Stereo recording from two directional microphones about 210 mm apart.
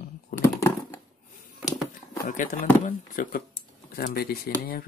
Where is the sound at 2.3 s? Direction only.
40° left (ahead or behind).